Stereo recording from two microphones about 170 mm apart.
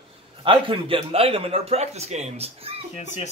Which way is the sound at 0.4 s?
30° right (ahead or behind).